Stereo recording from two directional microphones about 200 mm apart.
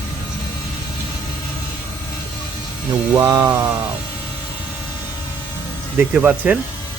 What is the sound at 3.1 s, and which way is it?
Speech, 15° right (ahead or behind).